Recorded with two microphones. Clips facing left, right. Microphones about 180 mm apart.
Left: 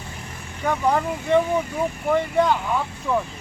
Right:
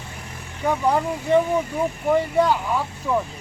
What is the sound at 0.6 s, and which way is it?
Speech, 10° right (ahead or behind).